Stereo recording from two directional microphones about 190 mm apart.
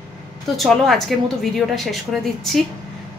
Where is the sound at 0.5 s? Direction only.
Centre (ahead or behind).